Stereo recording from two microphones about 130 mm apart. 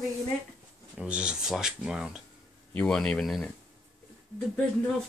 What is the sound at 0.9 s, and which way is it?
Speech, 10° right (ahead or behind).